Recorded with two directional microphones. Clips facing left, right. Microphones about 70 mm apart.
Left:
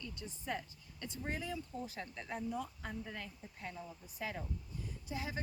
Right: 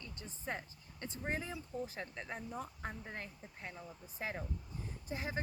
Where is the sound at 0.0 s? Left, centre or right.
Right.